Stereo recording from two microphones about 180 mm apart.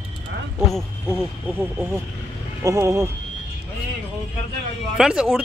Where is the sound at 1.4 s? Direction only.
10° right (ahead or behind).